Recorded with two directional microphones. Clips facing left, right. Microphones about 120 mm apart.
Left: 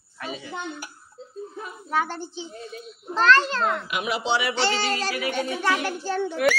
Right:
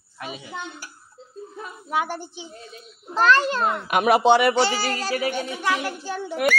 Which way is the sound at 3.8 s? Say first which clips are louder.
Right 9 dB; 55° right (ahead or behind).